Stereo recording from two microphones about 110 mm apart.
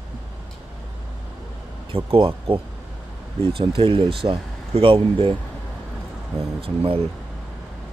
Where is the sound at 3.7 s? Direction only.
55° right (ahead or behind).